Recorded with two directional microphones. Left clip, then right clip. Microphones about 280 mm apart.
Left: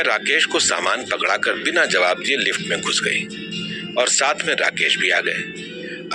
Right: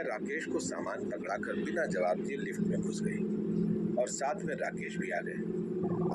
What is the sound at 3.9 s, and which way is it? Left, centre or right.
A man's voice, left.